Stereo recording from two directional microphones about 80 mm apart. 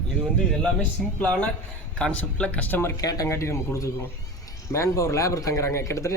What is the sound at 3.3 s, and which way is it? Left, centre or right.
A man's voice, left.